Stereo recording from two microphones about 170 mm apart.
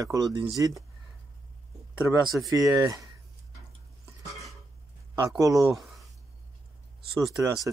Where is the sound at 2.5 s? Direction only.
20° right (ahead or behind).